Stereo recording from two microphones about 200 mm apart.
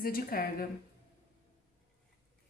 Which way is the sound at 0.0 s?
45° left (ahead or behind).